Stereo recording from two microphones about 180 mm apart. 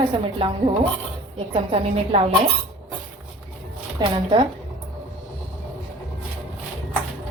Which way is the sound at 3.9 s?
30° right (ahead or behind).